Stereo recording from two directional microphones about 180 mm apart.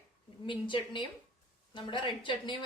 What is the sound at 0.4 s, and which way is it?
A woman's voice, 25° left (ahead or behind).